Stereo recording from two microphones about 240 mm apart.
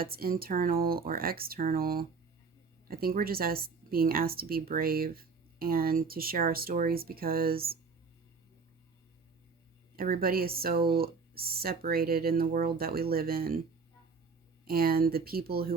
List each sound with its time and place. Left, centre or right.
0.0 s a woman's voice: right
9.9 s a woman's voice: right
14.6 s a woman's voice: right